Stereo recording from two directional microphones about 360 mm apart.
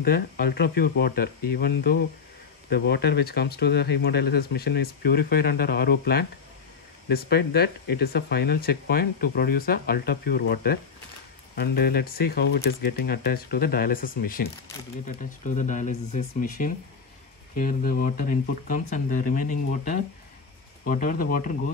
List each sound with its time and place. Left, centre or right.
0.0 s speech: left